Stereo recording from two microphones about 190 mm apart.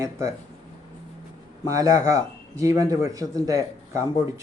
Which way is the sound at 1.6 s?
20° right (ahead or behind).